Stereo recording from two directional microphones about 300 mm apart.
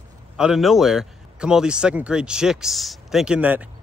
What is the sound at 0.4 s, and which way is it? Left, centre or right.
A man's voice, centre.